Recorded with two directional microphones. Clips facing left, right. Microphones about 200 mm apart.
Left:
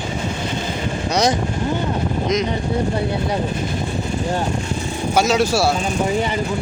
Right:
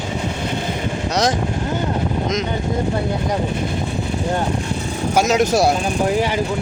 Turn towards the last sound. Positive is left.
turn(degrees=-15)  # may be behind; listen again after turning